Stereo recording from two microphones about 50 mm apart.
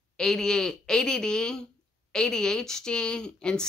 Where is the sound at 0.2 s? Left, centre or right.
Centre.